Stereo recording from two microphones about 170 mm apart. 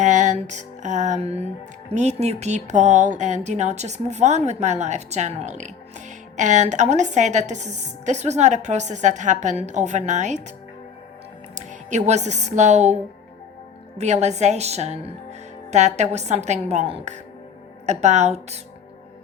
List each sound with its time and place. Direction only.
0.0 s music: 45° right (ahead or behind)
1.9 s speech: 40° right (ahead or behind)
11.5 s speech: 45° right (ahead or behind)
14.0 s speech: 40° right (ahead or behind)